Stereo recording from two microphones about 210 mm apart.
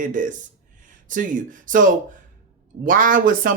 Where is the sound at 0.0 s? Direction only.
40° right (ahead or behind).